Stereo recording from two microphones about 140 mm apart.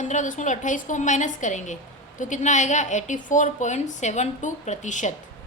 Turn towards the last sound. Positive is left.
turn(degrees=60)  # may be behind; listen again after turning